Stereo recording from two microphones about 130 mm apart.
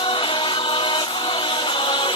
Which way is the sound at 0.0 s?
40° left (ahead or behind).